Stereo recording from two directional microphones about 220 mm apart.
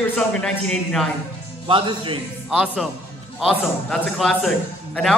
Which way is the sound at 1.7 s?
20° right (ahead or behind).